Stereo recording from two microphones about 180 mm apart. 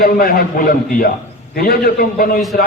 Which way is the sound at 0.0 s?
55° left (ahead or behind).